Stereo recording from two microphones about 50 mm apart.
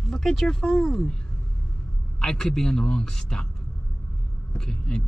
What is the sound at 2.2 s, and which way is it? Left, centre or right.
Speech, centre.